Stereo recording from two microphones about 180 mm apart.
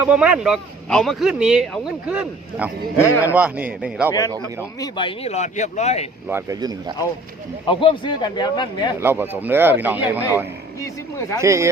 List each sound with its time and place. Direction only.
0.0 s a man's voice: 5° right (ahead or behind)
4.8 s speech: 25° left (ahead or behind)
6.2 s speech: 15° right (ahead or behind)
7.7 s a man's voice: 25° left (ahead or behind)
9.0 s a man's voice: 10° right (ahead or behind)
10.8 s speech: 20° left (ahead or behind)
11.3 s a man's voice: 15° right (ahead or behind)